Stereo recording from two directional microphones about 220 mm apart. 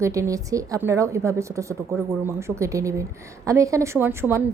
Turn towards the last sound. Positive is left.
turn(degrees=-10)  # may be behind; listen again after turning